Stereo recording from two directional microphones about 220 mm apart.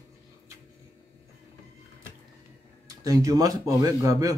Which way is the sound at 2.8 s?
15° right (ahead or behind).